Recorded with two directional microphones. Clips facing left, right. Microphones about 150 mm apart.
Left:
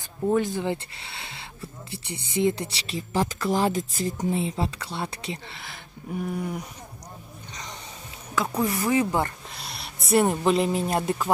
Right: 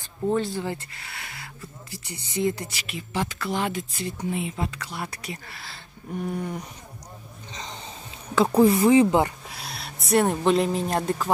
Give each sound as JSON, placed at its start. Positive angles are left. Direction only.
{"t": 0.4, "sound": "speech", "side_deg": 20}
{"t": 6.3, "sound": "speech", "side_deg": 5}
{"t": 8.4, "sound": "speech", "side_deg": -30}
{"t": 9.5, "sound": "speech", "side_deg": 0}